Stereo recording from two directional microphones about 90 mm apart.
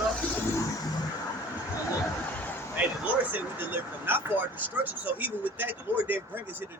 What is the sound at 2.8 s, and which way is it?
Speech, 20° right (ahead or behind).